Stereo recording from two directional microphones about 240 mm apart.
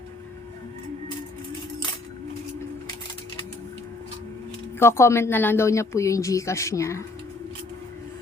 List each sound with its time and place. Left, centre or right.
4.8 s a woman's voice: centre